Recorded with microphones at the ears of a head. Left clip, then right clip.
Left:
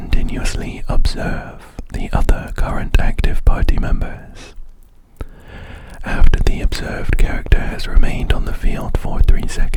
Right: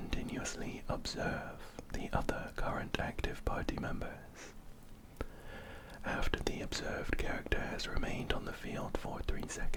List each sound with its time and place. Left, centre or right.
0.0 s speech: left
6.1 s speech: left